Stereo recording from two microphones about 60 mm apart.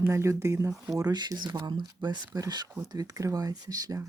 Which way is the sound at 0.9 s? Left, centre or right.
Right.